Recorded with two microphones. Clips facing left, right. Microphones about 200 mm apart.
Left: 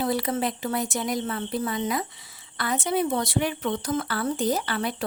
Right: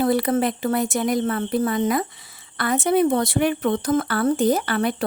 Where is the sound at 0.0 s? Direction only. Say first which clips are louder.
Right 6 dB; 55° right (ahead or behind).